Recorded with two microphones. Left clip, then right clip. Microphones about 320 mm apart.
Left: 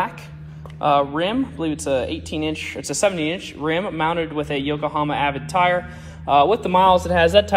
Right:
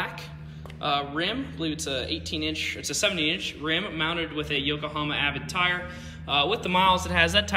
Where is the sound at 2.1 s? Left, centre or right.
Centre.